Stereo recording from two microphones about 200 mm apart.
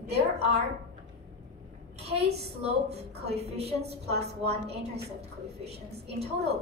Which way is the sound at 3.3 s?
30° right (ahead or behind).